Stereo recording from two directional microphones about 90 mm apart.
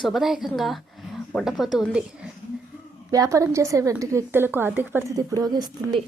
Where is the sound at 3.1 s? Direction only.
40° right (ahead or behind); by 5.0 s 20° right (ahead or behind).